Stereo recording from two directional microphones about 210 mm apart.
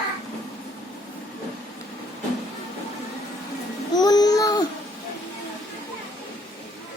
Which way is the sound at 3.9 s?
20° left (ahead or behind).